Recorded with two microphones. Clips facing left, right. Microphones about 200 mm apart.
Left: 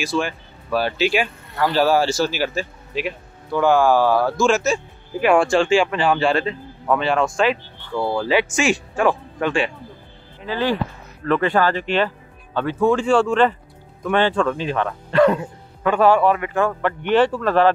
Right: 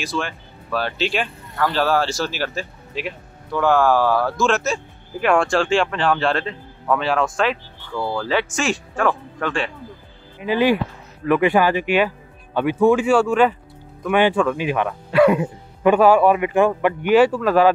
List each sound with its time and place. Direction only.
0.0 s speech: 5° left (ahead or behind)
7.9 s speech: 20° left (ahead or behind)
8.3 s speech: 5° left (ahead or behind)
10.4 s speech: 15° right (ahead or behind)